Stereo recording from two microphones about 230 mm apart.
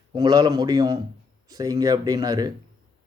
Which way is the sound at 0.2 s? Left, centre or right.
Centre.